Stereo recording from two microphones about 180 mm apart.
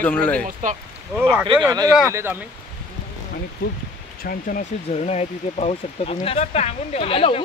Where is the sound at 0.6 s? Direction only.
45° right (ahead or behind).